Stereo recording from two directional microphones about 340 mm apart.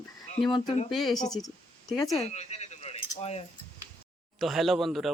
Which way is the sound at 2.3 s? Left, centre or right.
Centre.